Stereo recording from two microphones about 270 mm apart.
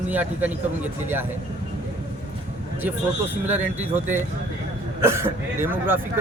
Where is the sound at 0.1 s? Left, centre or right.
Centre.